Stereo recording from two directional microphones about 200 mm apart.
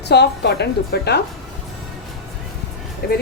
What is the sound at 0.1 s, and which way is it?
A woman's voice, 55° left (ahead or behind).